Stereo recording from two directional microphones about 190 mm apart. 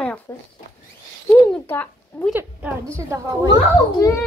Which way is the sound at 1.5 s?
10° left (ahead or behind).